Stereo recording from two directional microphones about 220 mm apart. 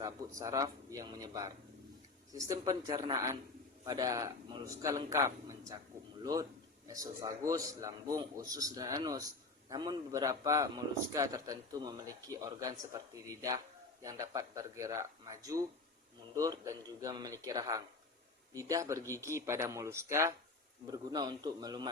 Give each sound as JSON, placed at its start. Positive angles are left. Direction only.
{"t": 0.0, "sound": "a man's voice", "side_deg": -15}
{"t": 6.8, "sound": "a man's voice", "side_deg": -15}